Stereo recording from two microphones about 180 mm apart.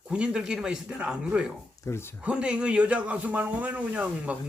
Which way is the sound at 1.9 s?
15° left (ahead or behind).